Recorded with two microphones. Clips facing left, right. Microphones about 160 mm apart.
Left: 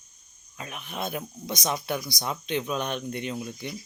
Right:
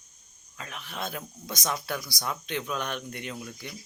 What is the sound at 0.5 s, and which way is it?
Speech, 20° left (ahead or behind).